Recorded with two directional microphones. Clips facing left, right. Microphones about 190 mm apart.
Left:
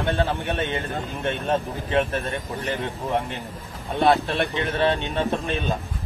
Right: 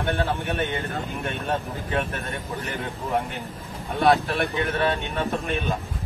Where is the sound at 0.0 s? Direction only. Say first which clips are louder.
Left 2 dB; 30° left (ahead or behind).